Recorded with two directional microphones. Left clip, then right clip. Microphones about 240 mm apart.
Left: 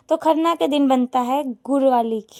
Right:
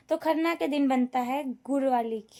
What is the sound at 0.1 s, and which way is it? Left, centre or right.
A woman's voice, left.